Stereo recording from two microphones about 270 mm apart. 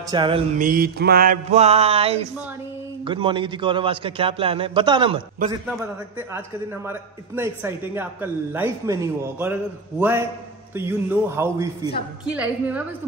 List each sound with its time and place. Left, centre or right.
0.1 s a man's voice: centre
0.6 s a man's voice: right
6.1 s a man's voice: centre